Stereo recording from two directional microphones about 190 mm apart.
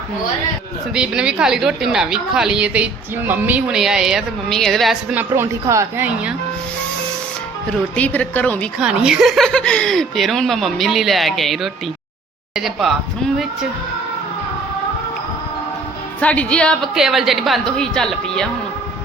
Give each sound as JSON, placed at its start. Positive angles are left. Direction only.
{"t": 0.9, "sound": "a woman's voice", "side_deg": -5}
{"t": 5.3, "sound": "speech", "side_deg": -15}
{"t": 7.7, "sound": "a woman's voice", "side_deg": 5}
{"t": 8.8, "sound": "a woman's voice", "side_deg": -5}
{"t": 16.2, "sound": "a woman's voice", "side_deg": 5}